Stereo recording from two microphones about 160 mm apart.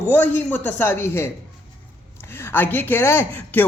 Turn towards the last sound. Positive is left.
turn(degrees=15)  # may be behind; listen again after turning